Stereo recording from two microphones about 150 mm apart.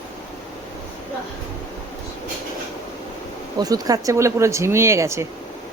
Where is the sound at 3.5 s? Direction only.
25° right (ahead or behind).